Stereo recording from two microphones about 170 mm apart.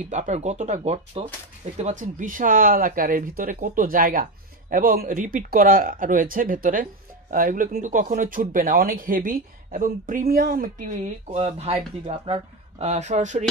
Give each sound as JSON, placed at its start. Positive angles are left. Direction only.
{"t": 0.1, "sound": "speech", "side_deg": -45}
{"t": 1.8, "sound": "speech", "side_deg": -45}